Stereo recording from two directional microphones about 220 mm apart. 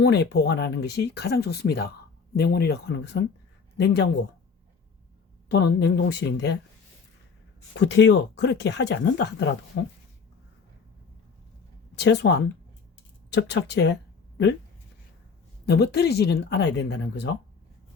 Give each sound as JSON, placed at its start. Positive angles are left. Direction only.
{"t": 0.0, "sound": "speech", "side_deg": 50}
{"t": 5.8, "sound": "speech", "side_deg": 50}
{"t": 7.8, "sound": "speech", "side_deg": 50}
{"t": 11.9, "sound": "speech", "side_deg": 55}
{"t": 15.6, "sound": "speech", "side_deg": 45}